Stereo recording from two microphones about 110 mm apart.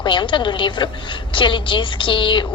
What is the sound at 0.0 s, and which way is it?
A woman's voice, 45° left (ahead or behind).